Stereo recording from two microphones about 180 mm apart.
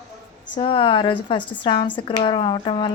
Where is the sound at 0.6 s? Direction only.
30° left (ahead or behind).